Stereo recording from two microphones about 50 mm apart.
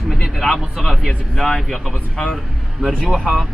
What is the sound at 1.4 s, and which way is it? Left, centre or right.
Speech, centre.